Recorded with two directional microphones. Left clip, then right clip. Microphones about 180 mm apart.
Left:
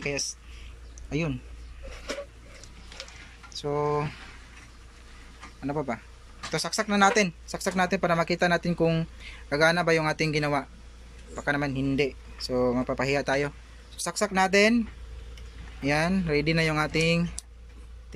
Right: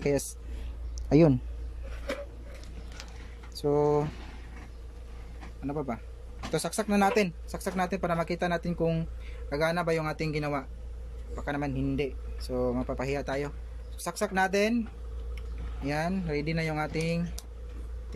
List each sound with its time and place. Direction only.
3.6 s speech: 20° right (ahead or behind)
5.6 s speech: 5° right (ahead or behind)
6.5 s speech: 15° right (ahead or behind); by 14.8 s centre (ahead or behind)
15.8 s speech: centre (ahead or behind)